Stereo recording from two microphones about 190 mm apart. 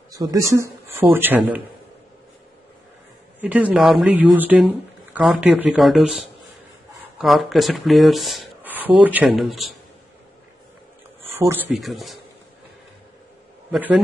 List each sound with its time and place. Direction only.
0.1 s speech: 20° right (ahead or behind)
3.3 s speech: 10° right (ahead or behind)
11.2 s a sound: 15° right (ahead or behind)
11.7 s speech: centre (ahead or behind)
13.7 s a man's voice: 5° right (ahead or behind)